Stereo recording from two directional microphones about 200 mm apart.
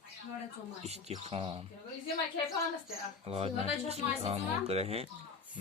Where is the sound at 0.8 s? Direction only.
30° right (ahead or behind).